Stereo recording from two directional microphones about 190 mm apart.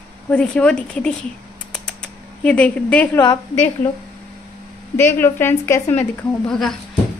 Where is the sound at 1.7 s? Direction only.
5° left (ahead or behind).